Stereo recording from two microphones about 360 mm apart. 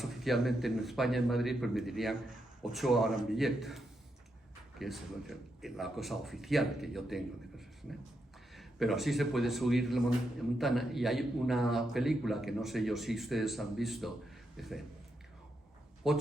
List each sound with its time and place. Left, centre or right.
0.0 s a man's voice: centre
8.5 s a man's voice: centre
16.0 s a man's voice: centre